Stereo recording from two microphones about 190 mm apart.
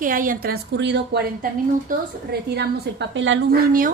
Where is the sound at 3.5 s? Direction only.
50° right (ahead or behind).